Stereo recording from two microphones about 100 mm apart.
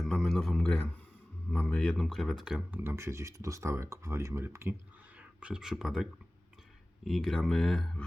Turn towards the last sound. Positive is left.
turn(degrees=5)  # may be behind; listen again after turning